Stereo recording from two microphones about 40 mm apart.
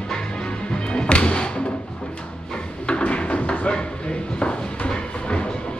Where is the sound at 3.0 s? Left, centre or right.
Left.